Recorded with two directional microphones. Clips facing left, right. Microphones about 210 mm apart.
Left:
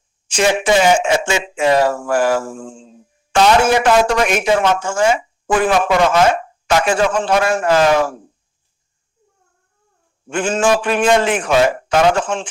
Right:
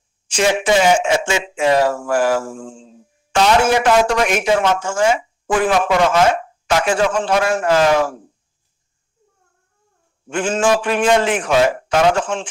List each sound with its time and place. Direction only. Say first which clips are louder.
0.3 s speech: left 1 dB; 50° left (ahead or behind)
10.3 s speech: left 1 dB; 50° left (ahead or behind)